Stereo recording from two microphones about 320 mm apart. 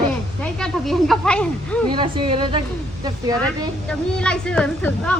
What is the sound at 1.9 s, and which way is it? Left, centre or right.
Speech, centre.